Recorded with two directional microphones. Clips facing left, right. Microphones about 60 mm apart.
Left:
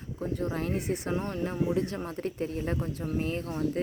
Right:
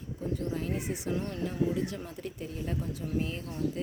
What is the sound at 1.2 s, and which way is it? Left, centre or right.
Speech, left.